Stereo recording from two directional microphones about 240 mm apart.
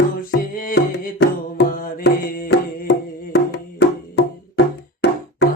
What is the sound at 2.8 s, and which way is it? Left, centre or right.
Music, left.